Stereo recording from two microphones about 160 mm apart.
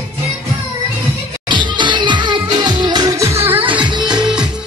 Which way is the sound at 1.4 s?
30° right (ahead or behind).